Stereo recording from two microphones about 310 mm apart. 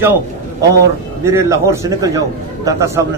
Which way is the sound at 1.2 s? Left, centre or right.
Centre.